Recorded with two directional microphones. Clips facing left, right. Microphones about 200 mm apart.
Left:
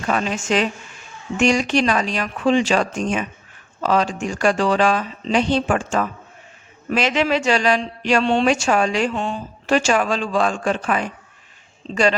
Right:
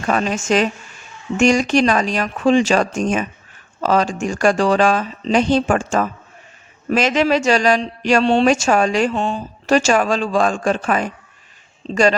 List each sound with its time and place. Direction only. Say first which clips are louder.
0.1 s a woman's voice: right 3 dB; 45° right (ahead or behind)